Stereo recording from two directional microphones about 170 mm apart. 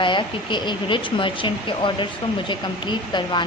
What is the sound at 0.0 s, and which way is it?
A woman's voice, 30° left (ahead or behind).